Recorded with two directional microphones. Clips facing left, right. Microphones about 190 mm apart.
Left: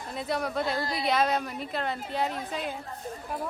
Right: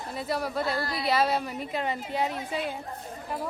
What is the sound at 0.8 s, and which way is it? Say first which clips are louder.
Speech: even; 25° left (ahead or behind).